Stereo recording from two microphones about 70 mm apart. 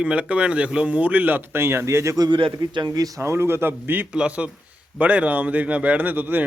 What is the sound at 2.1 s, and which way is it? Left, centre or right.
Speech, right.